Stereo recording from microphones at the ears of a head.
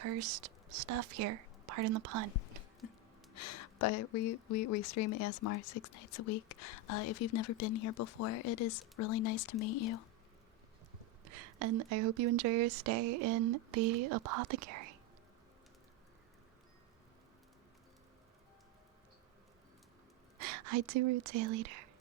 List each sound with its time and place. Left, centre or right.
0.0 s speech: right
3.3 s speech: left
11.3 s speech: right
20.4 s speech: right